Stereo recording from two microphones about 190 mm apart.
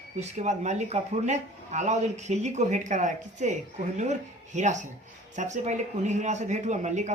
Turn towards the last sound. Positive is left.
turn(degrees=-40)  # may be behind; listen again after turning